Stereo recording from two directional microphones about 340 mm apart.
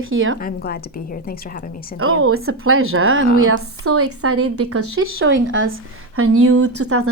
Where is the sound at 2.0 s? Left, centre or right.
Right.